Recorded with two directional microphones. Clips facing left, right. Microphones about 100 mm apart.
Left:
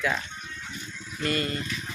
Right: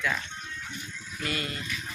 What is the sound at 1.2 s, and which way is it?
Speech, 5° right (ahead or behind).